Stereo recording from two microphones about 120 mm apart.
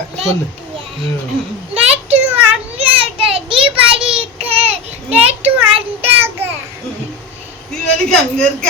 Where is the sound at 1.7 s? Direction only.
60° right (ahead or behind).